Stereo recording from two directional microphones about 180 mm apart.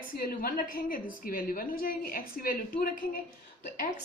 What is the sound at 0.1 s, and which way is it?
A woman's voice, 55° left (ahead or behind).